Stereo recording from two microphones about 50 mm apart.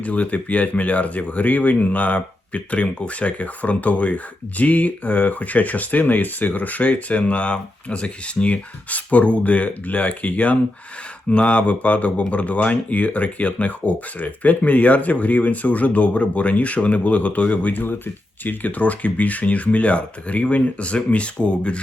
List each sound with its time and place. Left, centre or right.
0.0 s speech: left